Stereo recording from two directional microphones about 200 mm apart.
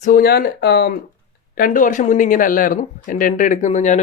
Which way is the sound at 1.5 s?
45° left (ahead or behind).